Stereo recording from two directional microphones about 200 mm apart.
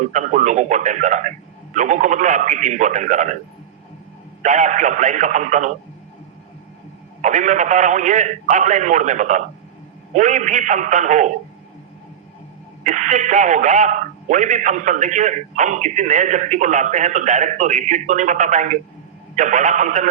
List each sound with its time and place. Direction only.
0.0 s speech: 35° right (ahead or behind)
4.4 s speech: 40° right (ahead or behind)
7.2 s speech: 35° right (ahead or behind)
12.8 s speech: 35° right (ahead or behind)